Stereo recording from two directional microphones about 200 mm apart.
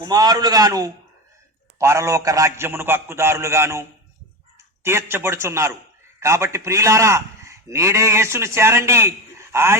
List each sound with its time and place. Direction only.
0.0 s a man's voice: 20° right (ahead or behind)